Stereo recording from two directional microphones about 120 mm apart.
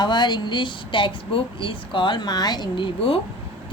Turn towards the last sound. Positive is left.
turn(degrees=45)  # may be behind; listen again after turning